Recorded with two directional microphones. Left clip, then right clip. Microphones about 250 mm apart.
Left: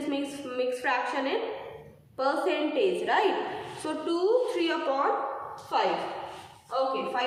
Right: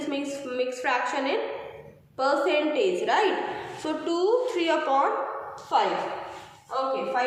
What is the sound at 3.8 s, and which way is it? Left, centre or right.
A woman's voice, centre.